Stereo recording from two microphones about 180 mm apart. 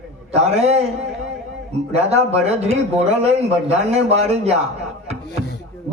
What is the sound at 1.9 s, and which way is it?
A man's voice, 35° right (ahead or behind).